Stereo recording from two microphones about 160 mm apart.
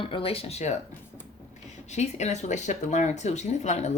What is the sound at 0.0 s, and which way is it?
Speech, 35° left (ahead or behind).